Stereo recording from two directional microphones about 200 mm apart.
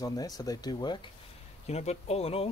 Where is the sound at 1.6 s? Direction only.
35° left (ahead or behind).